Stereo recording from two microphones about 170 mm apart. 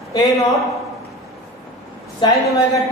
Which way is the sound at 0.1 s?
20° left (ahead or behind).